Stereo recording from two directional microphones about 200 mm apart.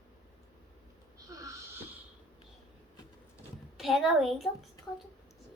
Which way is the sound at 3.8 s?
Centre (ahead or behind).